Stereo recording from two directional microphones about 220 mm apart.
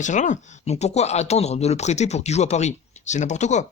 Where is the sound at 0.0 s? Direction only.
35° left (ahead or behind).